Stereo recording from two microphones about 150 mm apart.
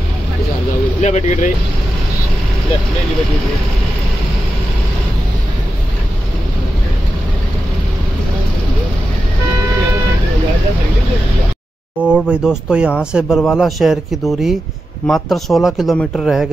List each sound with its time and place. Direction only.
1.0 s speech: 50° left (ahead or behind)
12.1 s speech: 5° right (ahead or behind)